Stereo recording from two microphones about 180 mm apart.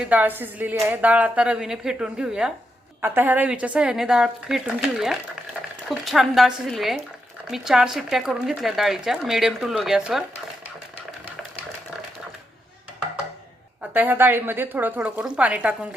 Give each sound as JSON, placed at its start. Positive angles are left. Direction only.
{"t": 0.0, "sound": "a woman's voice", "side_deg": -10}
{"t": 13.9, "sound": "a woman's voice", "side_deg": -10}